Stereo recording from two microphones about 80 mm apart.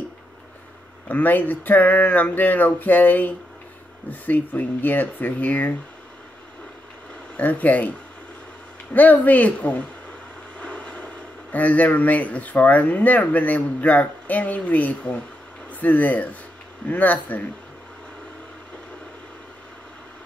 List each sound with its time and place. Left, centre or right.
1.0 s speech: left
7.3 s speech: centre
8.9 s speech: left
10.6 s vehicle: centre
11.5 s speech: centre